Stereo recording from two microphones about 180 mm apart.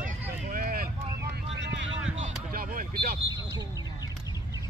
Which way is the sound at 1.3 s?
90° right.